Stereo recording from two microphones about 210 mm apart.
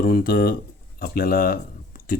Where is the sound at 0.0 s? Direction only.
45° left (ahead or behind).